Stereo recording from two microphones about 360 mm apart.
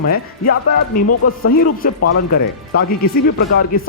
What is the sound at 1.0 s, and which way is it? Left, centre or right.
Speech, left.